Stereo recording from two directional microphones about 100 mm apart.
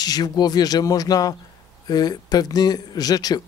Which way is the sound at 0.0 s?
40° left (ahead or behind).